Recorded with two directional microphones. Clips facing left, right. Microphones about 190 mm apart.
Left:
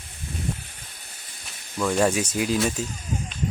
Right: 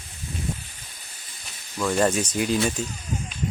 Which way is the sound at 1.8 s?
5° left (ahead or behind).